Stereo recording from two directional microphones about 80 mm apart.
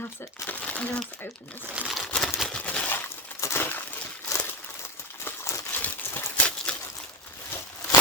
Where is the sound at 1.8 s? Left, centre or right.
Centre.